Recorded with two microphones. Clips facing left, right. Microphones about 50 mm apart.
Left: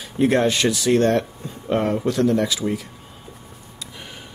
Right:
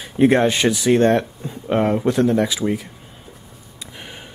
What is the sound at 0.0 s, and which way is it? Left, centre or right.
Speech, right.